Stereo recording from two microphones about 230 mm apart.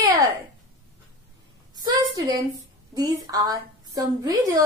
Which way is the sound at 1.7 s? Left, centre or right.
Centre.